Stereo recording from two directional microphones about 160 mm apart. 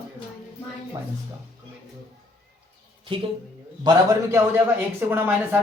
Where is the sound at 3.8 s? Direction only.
25° right (ahead or behind).